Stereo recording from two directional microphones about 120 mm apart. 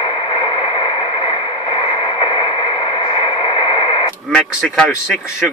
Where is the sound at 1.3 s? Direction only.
45° left (ahead or behind).